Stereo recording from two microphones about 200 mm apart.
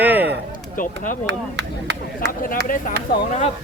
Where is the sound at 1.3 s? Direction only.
60° right (ahead or behind).